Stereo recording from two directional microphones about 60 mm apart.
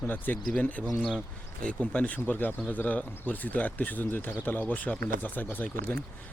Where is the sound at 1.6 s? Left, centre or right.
Centre.